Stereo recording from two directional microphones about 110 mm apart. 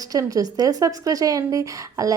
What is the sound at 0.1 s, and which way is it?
A woman's voice, 30° right (ahead or behind).